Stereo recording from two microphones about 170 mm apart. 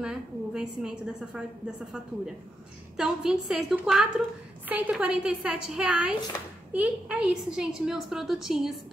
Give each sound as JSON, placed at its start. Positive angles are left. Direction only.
{"t": 0.0, "sound": "a woman's voice", "side_deg": -5}
{"t": 3.0, "sound": "a woman's voice", "side_deg": -5}